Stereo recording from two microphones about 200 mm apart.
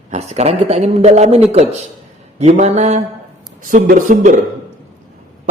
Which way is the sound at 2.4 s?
35° right (ahead or behind).